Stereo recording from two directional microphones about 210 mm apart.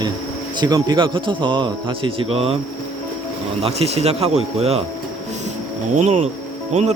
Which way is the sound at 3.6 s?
30° right (ahead or behind).